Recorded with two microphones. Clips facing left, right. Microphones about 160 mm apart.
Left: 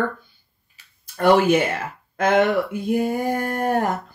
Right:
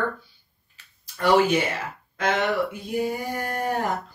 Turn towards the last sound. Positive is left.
turn(degrees=50)  # may be behind; listen again after turning